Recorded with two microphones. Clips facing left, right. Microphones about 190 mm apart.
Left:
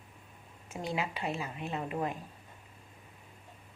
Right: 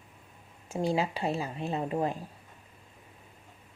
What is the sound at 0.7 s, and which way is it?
Speech, 30° right (ahead or behind).